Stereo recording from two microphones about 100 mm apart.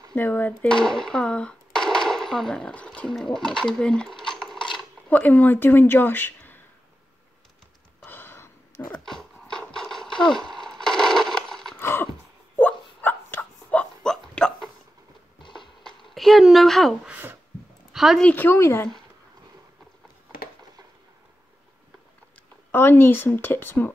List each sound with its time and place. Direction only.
0.1 s speech: 15° left (ahead or behind)
5.1 s speech: 15° left (ahead or behind)
8.0 s a sound: 20° left (ahead or behind)
8.9 s horse: 5° left (ahead or behind)
10.2 s speech: 5° left (ahead or behind)
10.6 s crushing: 5° left (ahead or behind)
11.8 s a sound: 25° left (ahead or behind); by 14.7 s 5° left (ahead or behind)
15.8 s a sound: centre (ahead or behind)
17.1 s speech: 20° right (ahead or behind)
17.9 s speech: 5° right (ahead or behind)
18.2 s speech: 20° left (ahead or behind)
22.7 s speech: 20° left (ahead or behind)